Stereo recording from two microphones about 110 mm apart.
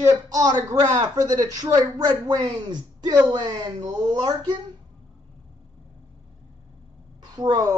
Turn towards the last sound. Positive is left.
turn(degrees=-35)  # may be behind; listen again after turning